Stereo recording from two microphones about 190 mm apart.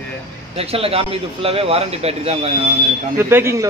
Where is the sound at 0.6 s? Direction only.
30° right (ahead or behind).